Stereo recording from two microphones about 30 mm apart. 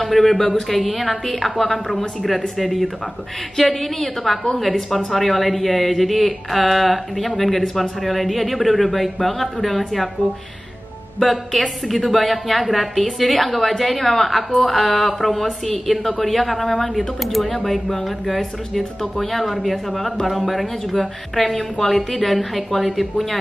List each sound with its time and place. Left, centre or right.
0.0 s speech: centre
2.5 s speech: centre
11.1 s speech: centre
21.5 s a woman's voice: centre
22.2 s speech: centre